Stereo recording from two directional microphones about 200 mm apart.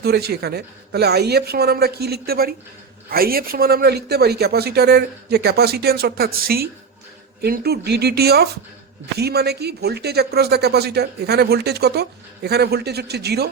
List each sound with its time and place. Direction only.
0.0 s speech: 50° right (ahead or behind)